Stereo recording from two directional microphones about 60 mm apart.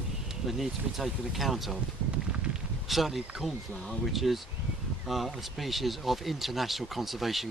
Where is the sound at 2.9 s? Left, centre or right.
Centre.